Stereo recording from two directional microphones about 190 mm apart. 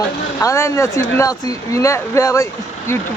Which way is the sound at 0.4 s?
15° left (ahead or behind).